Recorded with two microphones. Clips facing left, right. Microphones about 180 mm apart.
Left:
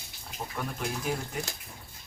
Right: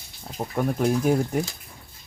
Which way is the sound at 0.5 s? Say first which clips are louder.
Right 13 dB; 45° right (ahead or behind).